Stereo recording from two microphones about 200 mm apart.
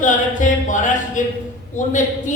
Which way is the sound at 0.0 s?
40° left (ahead or behind).